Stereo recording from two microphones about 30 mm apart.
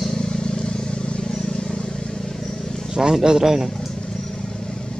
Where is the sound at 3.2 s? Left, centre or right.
Centre.